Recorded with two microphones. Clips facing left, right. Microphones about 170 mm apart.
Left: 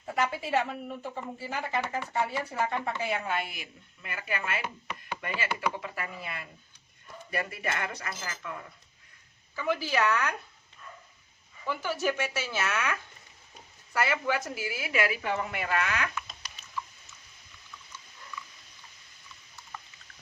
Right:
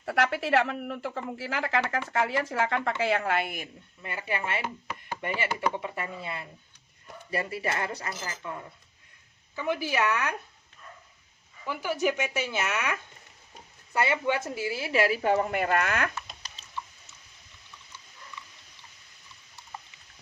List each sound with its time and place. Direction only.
0.0 s a woman's voice: 80° right; by 3.7 s 55° right (ahead or behind)
4.0 s a woman's voice: 30° right (ahead or behind)
9.6 s speech: 15° right (ahead or behind)
11.6 s a woman's voice: 15° right (ahead or behind); by 16.1 s 50° right (ahead or behind)
16.8 s a sound: 30° right (ahead or behind)